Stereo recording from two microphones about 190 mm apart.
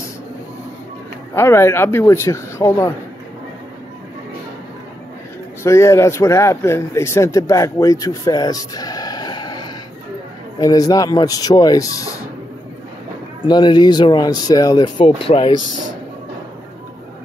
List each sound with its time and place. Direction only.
1.3 s a man's voice: 15° left (ahead or behind)
5.6 s a man's voice: 15° left (ahead or behind)
13.4 s speech: 25° left (ahead or behind)